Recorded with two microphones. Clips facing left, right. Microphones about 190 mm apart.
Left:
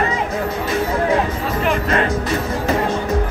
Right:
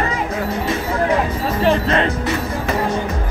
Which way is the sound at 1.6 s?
30° right (ahead or behind).